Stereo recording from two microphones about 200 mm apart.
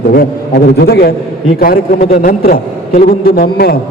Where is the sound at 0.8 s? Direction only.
50° left (ahead or behind).